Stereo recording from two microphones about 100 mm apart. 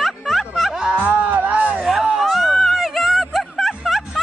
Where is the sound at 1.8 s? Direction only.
5° right (ahead or behind).